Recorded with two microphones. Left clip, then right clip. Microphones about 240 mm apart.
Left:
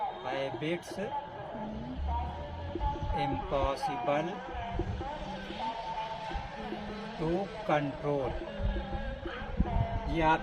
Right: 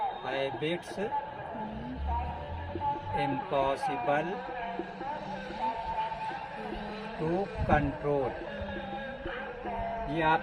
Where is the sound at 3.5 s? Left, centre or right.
Centre.